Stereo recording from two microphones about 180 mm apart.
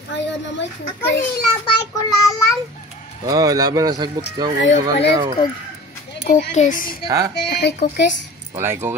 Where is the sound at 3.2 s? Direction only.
20° right (ahead or behind).